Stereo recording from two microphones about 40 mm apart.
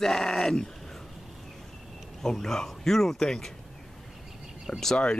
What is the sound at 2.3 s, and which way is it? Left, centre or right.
Speech, centre.